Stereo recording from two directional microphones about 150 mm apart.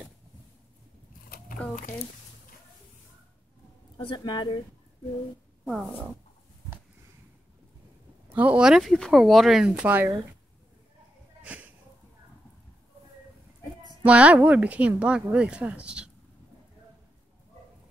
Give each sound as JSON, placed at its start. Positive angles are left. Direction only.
{"t": 4.0, "sound": "speech", "side_deg": 30}
{"t": 5.7, "sound": "speech", "side_deg": -5}
{"t": 8.3, "sound": "speech", "side_deg": -10}
{"t": 11.4, "sound": "a sound", "side_deg": -10}
{"t": 14.0, "sound": "speech", "side_deg": -10}